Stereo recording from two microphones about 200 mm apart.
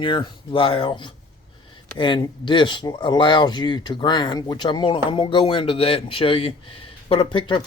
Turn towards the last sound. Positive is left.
turn(degrees=25)  # may be behind; listen again after turning